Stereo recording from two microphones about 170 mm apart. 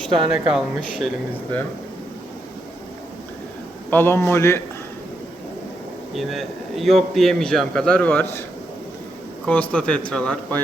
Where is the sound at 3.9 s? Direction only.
10° left (ahead or behind).